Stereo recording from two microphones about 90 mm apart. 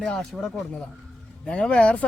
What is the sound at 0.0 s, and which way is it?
Speech, 10° left (ahead or behind).